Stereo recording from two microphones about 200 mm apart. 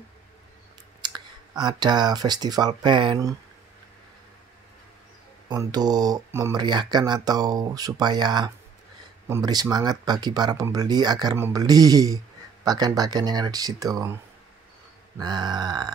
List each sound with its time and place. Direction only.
1.0 s speech: 20° right (ahead or behind)
5.5 s speech: 20° right (ahead or behind)
15.1 s speech: 20° right (ahead or behind)